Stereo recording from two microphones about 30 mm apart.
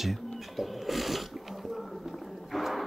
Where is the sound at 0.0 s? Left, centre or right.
Centre.